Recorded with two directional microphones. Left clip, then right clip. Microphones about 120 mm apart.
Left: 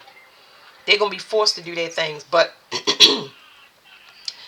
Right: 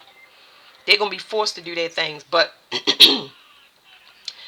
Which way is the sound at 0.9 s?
40° right (ahead or behind).